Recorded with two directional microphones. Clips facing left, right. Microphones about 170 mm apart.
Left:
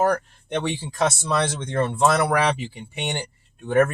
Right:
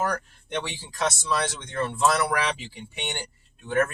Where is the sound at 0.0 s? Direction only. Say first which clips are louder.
Left 7 dB; 50° left (ahead or behind).